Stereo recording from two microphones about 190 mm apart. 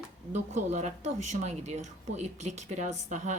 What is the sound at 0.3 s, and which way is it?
Speech, 40° right (ahead or behind).